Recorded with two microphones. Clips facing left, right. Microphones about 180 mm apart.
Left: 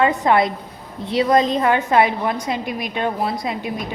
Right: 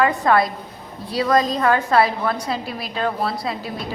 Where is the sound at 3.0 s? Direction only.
20° left (ahead or behind).